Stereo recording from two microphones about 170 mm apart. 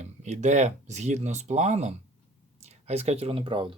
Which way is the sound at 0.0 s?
45° right (ahead or behind).